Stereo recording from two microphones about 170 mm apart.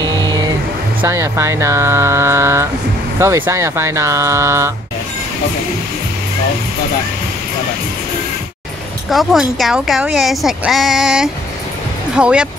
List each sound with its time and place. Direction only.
0.0 s music: 25° right (ahead or behind)
1.0 s speech: 15° right (ahead or behind)
9.1 s speech: centre (ahead or behind)